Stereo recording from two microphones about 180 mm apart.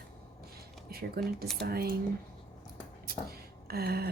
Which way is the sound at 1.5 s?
60° right (ahead or behind).